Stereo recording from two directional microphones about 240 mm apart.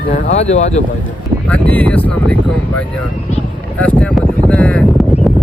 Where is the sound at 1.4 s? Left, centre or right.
Centre.